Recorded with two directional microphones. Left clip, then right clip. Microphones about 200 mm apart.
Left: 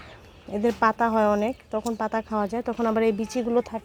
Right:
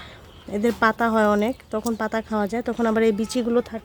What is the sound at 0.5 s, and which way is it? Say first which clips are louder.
Speech: right 2 dB; 10° right (ahead or behind).